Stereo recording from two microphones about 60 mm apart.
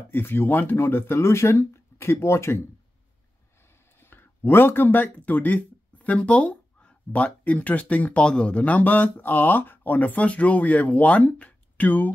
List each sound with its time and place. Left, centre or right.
0.1 s speech: left
4.0 s speech: left